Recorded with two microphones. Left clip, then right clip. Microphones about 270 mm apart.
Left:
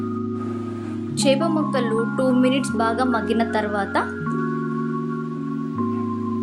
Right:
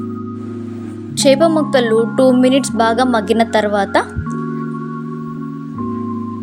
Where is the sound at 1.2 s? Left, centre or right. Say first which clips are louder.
Right 9 dB; right.